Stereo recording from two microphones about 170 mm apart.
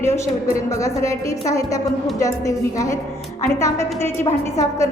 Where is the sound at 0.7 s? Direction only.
20° left (ahead or behind).